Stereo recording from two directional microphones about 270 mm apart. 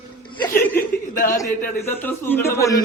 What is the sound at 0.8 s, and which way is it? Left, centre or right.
Chuckle, left.